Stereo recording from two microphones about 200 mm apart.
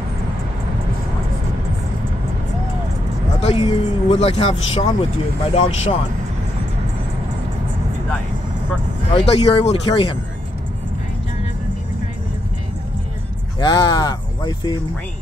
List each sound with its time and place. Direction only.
3.3 s speech: 30° left (ahead or behind)
9.1 s speech: 30° left (ahead or behind)
13.6 s speech: 20° left (ahead or behind)